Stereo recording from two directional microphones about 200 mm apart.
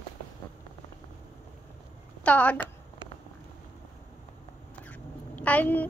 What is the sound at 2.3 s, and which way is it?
Speech, 5° left (ahead or behind).